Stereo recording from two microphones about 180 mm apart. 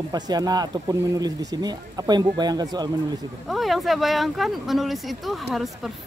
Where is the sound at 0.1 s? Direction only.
20° right (ahead or behind).